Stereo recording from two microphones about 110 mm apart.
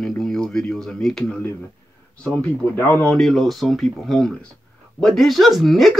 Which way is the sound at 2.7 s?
15° left (ahead or behind).